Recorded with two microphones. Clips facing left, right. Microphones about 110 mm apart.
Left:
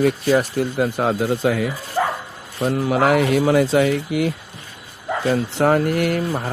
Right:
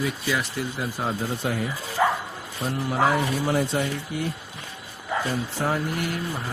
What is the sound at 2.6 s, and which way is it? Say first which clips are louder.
A man's voice: left 6 dB; 85° left.